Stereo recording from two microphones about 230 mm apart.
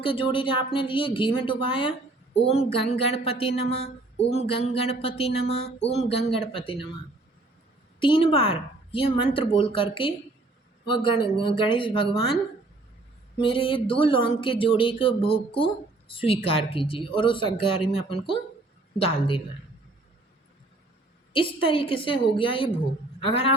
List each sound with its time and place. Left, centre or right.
0.0 s speech: left
7.9 s speech: left
13.4 s speech: left
21.3 s speech: left